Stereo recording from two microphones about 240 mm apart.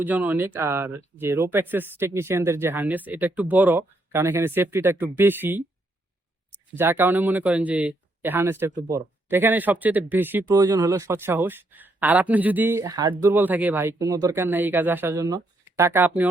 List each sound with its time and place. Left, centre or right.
0.0 s speech: centre
6.7 s speech: centre